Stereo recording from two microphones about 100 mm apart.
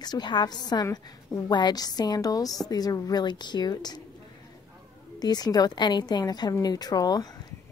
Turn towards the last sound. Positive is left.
turn(degrees=40)  # may be behind; listen again after turning